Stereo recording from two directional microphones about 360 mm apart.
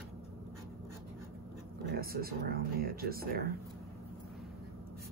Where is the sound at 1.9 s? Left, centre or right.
Right.